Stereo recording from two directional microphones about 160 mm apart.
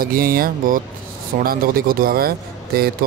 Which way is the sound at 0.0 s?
65° right (ahead or behind).